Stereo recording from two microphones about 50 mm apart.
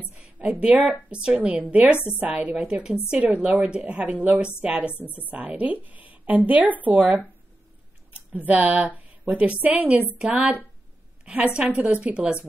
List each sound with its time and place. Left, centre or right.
0.2 s a woman's voice: right
2.6 s a woman's voice: centre
3.3 s a woman's voice: right
8.3 s a woman's voice: right
10.2 s a woman's voice: centre
11.2 s a woman's voice: right